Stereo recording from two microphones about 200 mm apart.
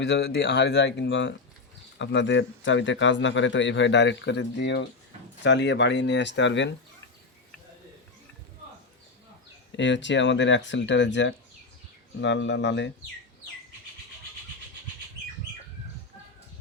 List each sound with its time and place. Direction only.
0.0 s a man's voice: 55° left (ahead or behind)
9.7 s a man's voice: 65° left (ahead or behind)